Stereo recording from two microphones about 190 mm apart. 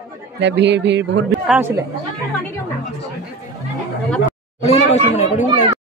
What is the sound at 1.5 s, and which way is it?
Speech, 10° right (ahead or behind).